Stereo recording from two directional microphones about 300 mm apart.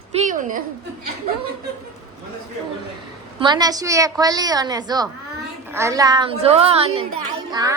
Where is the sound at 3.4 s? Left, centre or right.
Centre.